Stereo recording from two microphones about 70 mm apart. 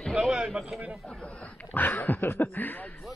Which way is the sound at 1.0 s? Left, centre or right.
Centre.